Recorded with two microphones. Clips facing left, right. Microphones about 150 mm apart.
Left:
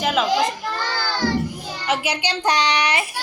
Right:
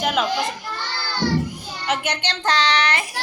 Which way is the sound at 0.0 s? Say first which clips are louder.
Left 1 dB; centre (ahead or behind).